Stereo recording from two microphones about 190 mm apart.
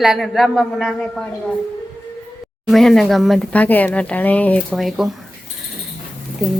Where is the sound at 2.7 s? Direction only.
Centre (ahead or behind).